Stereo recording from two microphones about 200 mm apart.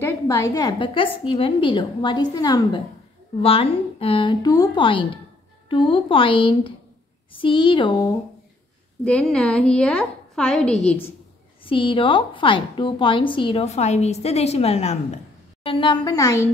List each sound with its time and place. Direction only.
0.0 s a woman's voice: 15° left (ahead or behind)
9.0 s a woman's voice: 5° left (ahead or behind)
11.6 s a woman's voice: 25° left (ahead or behind)